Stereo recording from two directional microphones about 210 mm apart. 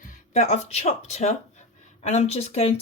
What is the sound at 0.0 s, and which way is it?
Speech, 35° left (ahead or behind).